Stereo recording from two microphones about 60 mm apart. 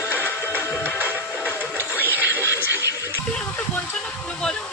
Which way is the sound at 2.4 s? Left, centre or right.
Right.